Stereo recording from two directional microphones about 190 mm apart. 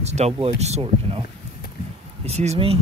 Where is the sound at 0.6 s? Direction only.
35° right (ahead or behind).